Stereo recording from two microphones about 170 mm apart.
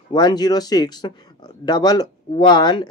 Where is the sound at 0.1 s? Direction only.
25° left (ahead or behind).